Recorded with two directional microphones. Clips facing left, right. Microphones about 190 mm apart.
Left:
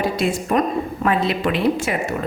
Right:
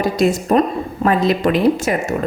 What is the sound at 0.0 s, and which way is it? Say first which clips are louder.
A woman's voice: right 5 dB; 40° right (ahead or behind).